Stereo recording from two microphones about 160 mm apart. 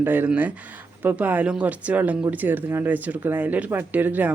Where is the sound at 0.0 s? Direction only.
10° right (ahead or behind).